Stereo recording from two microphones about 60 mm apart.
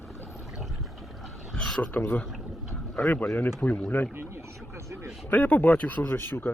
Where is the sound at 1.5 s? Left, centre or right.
Centre.